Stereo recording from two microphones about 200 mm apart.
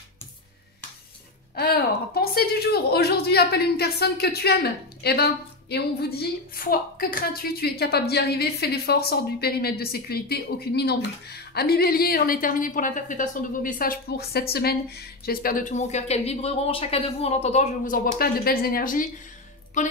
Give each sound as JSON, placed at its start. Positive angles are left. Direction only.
{"t": 1.5, "sound": "a woman's voice", "side_deg": 50}